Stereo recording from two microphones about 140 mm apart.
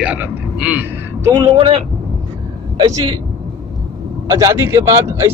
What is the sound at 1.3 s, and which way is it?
Speech, 35° right (ahead or behind).